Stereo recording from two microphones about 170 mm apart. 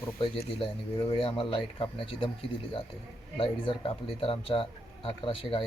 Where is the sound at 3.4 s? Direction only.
30° left (ahead or behind).